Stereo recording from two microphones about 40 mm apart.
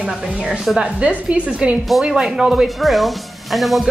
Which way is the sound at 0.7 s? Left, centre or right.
Right.